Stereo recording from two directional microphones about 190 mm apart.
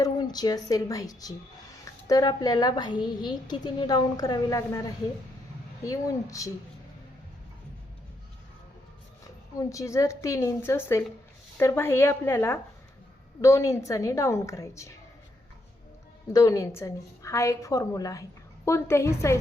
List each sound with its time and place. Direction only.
0.0 s a woman's voice: 20° left (ahead or behind)
9.6 s a woman's voice: 15° left (ahead or behind)
16.3 s a woman's voice: 15° left (ahead or behind)